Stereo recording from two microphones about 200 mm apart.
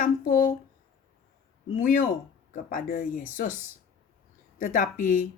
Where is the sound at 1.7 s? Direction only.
40° left (ahead or behind).